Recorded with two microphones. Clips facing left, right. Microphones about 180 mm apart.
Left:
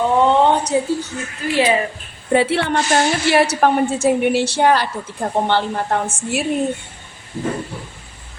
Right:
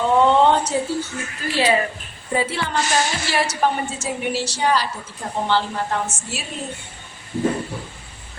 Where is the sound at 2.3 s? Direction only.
70° left (ahead or behind).